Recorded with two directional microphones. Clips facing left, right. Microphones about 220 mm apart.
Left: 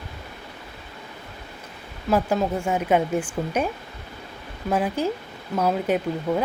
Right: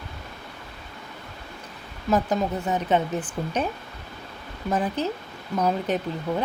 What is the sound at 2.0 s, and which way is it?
Speech, 10° left (ahead or behind).